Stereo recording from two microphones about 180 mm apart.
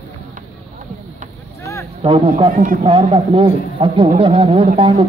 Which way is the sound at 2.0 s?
30° right (ahead or behind).